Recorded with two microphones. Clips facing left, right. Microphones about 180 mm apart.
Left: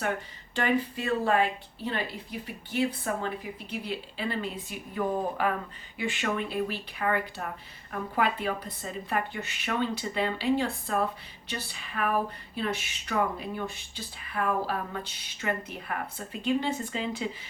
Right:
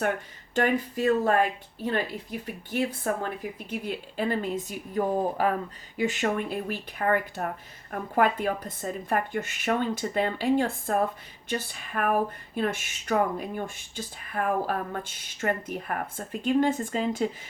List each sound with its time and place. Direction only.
0.5 s speech: 45° right (ahead or behind)